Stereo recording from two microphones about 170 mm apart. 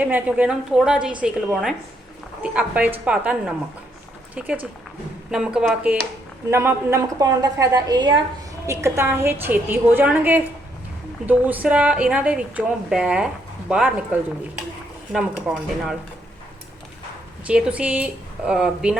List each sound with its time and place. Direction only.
0.0 s a woman's voice: 10° right (ahead or behind)
2.4 s a woman's voice: 10° right (ahead or behind)
17.4 s speech: 5° right (ahead or behind)